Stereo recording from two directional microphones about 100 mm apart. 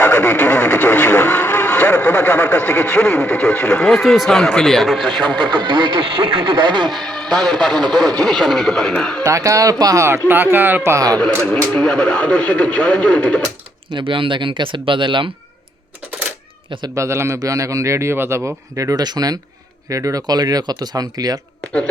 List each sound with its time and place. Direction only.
0.0 s speech: 20° left (ahead or behind); by 5.2 s centre (ahead or behind)
5.2 s speech: 50° right (ahead or behind)
6.9 s a man's voice: 5° left (ahead or behind)
9.2 s a man's voice: 35° right (ahead or behind)
10.9 s a man's voice: 35° right (ahead or behind)
11.7 s speech: 10° left (ahead or behind)
13.9 s speech: 60° right (ahead or behind)
16.9 s a man's voice: 30° right (ahead or behind)